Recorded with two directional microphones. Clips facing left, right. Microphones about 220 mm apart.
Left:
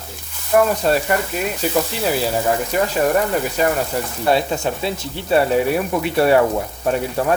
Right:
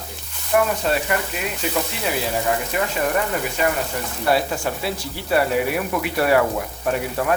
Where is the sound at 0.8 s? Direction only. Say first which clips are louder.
Left 4 dB; 40° left (ahead or behind).